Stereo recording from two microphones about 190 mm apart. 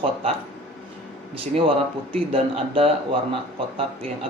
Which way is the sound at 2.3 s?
30° right (ahead or behind).